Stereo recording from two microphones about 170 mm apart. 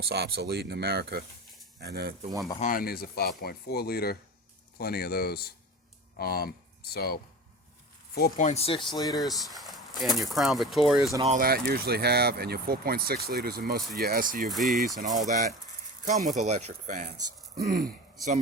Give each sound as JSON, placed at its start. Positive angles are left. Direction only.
{"t": 0.1, "sound": "speech", "side_deg": -70}
{"t": 2.6, "sound": "speech", "side_deg": 55}
{"t": 8.1, "sound": "speech", "side_deg": 55}
{"t": 9.0, "sound": "speech", "side_deg": 20}
{"t": 9.2, "sound": "speech", "side_deg": 0}
{"t": 11.3, "sound": "speech", "side_deg": -65}
{"t": 14.5, "sound": "speech", "side_deg": 0}
{"t": 14.9, "sound": "speech", "side_deg": -50}